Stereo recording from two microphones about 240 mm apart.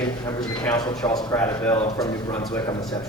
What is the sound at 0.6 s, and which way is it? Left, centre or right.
A man's voice, centre.